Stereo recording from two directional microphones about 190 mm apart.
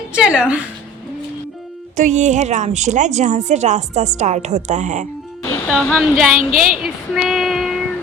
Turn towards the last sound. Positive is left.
turn(degrees=0)  # may be behind; listen again after turning